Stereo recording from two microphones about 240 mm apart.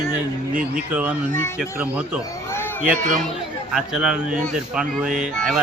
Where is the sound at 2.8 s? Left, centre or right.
Right.